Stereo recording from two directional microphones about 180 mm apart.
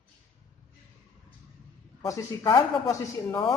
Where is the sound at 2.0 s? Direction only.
20° left (ahead or behind).